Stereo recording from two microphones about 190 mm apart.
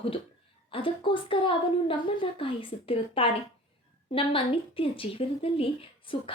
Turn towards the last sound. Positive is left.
turn(degrees=30)  # may be behind; listen again after turning